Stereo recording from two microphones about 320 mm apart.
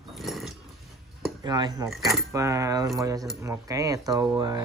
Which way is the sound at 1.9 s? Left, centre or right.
Centre.